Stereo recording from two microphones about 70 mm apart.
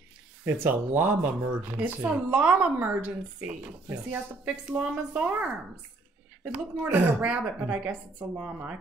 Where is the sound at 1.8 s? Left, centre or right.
Centre.